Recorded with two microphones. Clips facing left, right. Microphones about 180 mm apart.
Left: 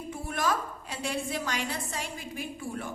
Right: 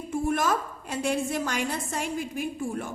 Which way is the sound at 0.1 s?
45° right (ahead or behind).